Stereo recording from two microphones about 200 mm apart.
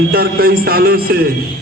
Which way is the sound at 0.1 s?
50° right (ahead or behind).